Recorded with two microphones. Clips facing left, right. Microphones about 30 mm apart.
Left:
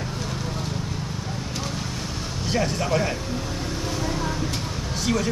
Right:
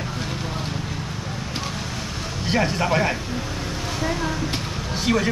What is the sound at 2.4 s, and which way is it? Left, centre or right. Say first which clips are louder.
Speech: right 3 dB; right.